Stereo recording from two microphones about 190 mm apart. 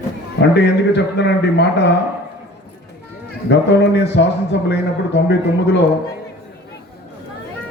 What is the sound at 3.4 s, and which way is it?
A man's voice, 65° left (ahead or behind).